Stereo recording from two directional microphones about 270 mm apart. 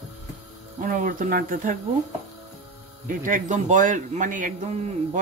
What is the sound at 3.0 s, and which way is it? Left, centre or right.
Speech, right.